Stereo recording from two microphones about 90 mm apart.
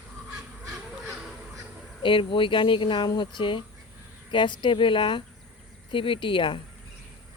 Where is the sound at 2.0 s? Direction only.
70° left (ahead or behind).